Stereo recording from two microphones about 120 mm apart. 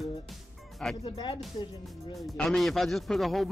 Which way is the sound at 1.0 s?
40° left (ahead or behind).